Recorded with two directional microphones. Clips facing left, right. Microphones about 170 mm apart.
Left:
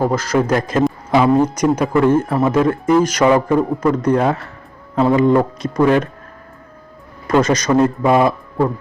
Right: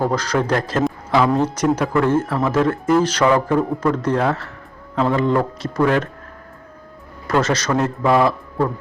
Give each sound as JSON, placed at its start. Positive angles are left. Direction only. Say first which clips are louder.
{"t": 0.0, "sound": "speech", "louder": "left 3 dB", "side_deg": 5}
{"t": 7.3, "sound": "speech", "louder": "left 4 dB", "side_deg": 15}